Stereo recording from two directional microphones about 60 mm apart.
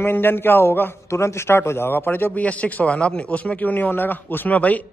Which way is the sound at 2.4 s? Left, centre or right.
Left.